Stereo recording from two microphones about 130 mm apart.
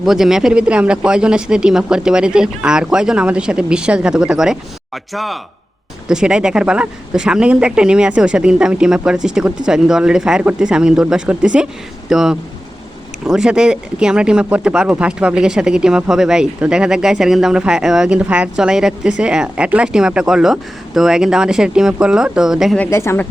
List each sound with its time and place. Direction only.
0.0 s speech: 5° right (ahead or behind)
22.8 s speech: 20° left (ahead or behind)